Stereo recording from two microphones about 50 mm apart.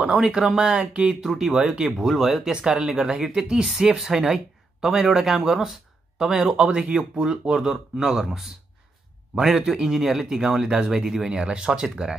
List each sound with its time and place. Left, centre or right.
0.0 s speech: centre
1.2 s speech: centre
2.5 s speech: centre